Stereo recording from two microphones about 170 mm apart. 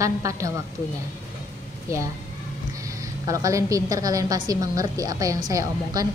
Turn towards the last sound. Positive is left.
turn(degrees=-20)  # may be behind; listen again after turning